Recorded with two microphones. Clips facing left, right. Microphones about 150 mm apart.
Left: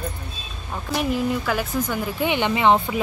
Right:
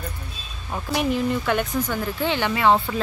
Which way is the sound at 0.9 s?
5° left (ahead or behind).